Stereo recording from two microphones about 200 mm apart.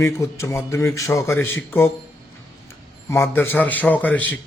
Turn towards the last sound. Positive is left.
turn(degrees=10)  # may be behind; listen again after turning